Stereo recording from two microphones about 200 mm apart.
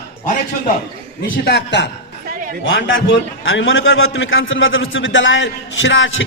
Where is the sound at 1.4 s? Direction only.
60° left (ahead or behind).